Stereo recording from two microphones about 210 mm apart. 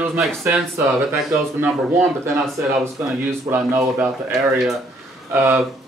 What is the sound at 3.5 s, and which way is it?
Speech, 10° right (ahead or behind).